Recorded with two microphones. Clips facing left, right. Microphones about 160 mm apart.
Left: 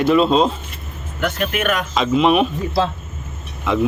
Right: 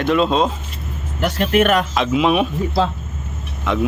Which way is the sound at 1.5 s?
35° right (ahead or behind).